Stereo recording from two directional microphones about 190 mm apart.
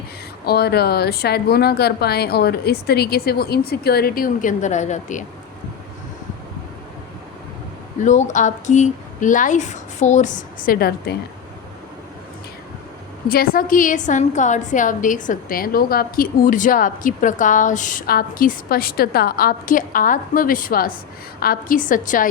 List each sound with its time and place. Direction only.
0.4 s speech: 55° left (ahead or behind); by 5.2 s 40° left (ahead or behind)
8.0 s speech: 40° left (ahead or behind)
13.2 s a woman's voice: 50° left (ahead or behind)